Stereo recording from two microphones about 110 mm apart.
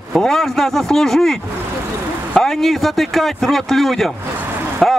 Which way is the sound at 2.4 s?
5° left (ahead or behind).